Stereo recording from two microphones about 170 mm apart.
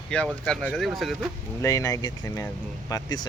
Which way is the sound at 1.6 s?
20° left (ahead or behind).